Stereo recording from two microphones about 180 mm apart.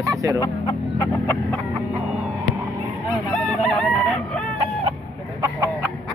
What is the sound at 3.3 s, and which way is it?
Chicken, 5° left (ahead or behind).